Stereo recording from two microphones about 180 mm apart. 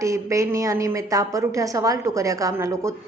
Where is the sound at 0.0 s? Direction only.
15° right (ahead or behind).